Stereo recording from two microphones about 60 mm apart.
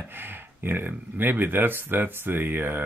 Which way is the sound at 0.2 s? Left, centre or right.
Right.